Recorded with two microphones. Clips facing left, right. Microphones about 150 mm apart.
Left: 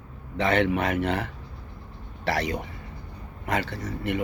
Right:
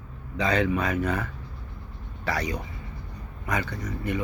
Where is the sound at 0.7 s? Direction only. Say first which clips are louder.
Left 1 dB; 70° left (ahead or behind).